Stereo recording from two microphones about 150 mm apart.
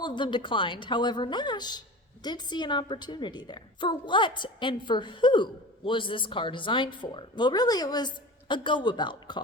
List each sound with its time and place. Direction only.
0.0 s a woman's voice: 30° left (ahead or behind)